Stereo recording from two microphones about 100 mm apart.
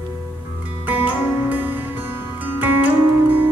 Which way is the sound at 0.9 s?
15° right (ahead or behind).